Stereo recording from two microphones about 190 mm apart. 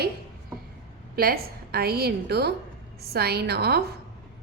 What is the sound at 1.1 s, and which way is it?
A woman's voice, 55° right (ahead or behind).